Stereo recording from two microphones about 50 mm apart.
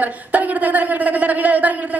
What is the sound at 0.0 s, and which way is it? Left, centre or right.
A woman's voice, right.